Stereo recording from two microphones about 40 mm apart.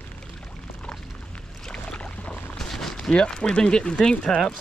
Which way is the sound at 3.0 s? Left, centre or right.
Centre.